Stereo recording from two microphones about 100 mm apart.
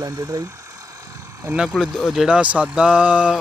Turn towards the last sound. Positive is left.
turn(degrees=-10)  # may be behind; listen again after turning